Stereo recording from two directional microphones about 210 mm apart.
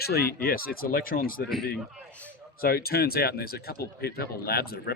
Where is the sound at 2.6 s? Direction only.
45° left (ahead or behind).